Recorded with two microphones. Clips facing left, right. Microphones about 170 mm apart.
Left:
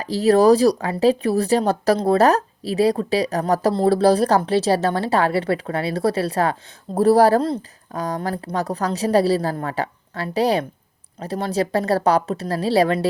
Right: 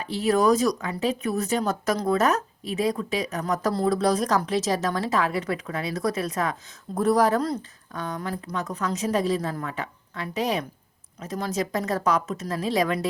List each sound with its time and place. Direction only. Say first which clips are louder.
0.0 s speech: left 7 dB; 35° left (ahead or behind)